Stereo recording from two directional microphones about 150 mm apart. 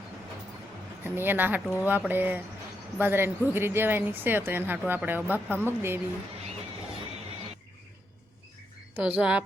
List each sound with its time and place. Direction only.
1.0 s a woman's voice: 15° right (ahead or behind)
9.0 s a woman's voice: 10° right (ahead or behind)